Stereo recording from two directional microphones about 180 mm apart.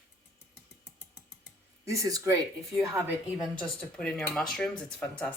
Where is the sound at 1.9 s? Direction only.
20° right (ahead or behind).